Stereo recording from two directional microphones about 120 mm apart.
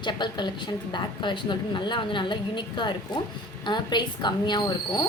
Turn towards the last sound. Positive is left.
turn(degrees=40)  # may be behind; listen again after turning